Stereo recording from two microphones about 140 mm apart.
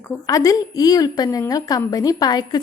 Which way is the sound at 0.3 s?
25° left (ahead or behind).